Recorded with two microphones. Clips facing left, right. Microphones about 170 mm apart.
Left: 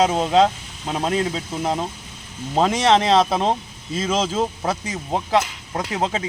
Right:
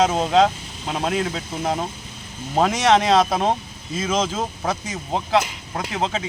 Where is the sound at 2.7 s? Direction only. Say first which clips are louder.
Even; 30° left (ahead or behind).